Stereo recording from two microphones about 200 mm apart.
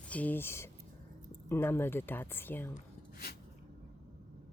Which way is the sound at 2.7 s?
50° left (ahead or behind).